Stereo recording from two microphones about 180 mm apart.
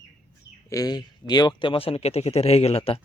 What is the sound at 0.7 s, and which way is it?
Speech, 20° left (ahead or behind).